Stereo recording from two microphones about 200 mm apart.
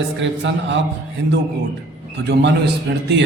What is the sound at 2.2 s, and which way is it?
Speech, 60° right (ahead or behind).